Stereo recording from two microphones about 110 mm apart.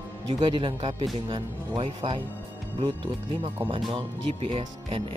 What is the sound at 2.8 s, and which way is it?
Speech, 45° right (ahead or behind).